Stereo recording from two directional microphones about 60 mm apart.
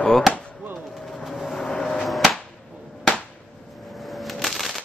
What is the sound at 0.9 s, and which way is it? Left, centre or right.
Vehicle, centre.